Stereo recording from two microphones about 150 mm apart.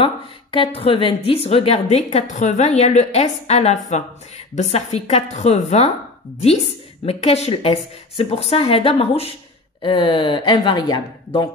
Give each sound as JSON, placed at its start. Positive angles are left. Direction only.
{"t": 0.0, "sound": "a woman's voice", "side_deg": 35}
{"t": 7.1, "sound": "a woman's voice", "side_deg": 40}